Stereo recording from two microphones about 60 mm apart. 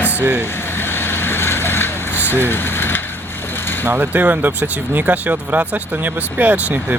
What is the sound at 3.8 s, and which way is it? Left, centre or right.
Speech, right.